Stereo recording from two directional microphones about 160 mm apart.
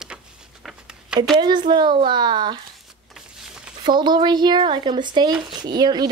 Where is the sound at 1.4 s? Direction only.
30° right (ahead or behind).